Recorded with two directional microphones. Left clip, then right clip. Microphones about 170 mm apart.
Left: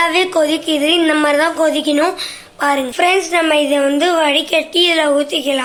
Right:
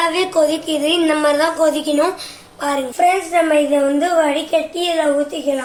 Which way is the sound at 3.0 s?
25° left (ahead or behind).